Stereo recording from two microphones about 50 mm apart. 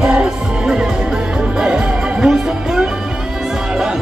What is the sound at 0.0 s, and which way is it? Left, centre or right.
Music, centre.